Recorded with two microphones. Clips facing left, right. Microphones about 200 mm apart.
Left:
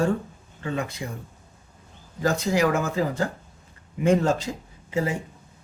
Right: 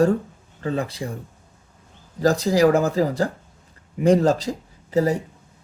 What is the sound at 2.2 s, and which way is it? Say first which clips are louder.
Speech: right 5 dB; 35° right (ahead or behind).